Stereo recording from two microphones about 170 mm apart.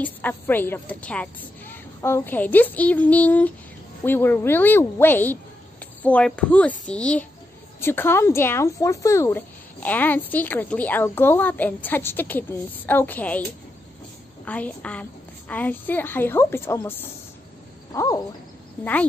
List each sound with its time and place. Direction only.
0.0 s a woman's voice: 10° left (ahead or behind)
14.4 s a woman's voice: 10° left (ahead or behind)
17.9 s a sound: 20° left (ahead or behind)